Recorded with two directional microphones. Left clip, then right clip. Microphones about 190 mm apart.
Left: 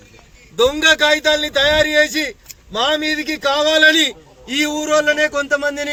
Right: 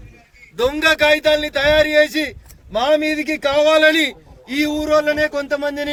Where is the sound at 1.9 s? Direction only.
25° right (ahead or behind).